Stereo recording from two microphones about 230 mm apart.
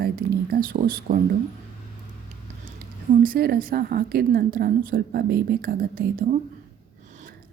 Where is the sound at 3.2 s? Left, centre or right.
Right.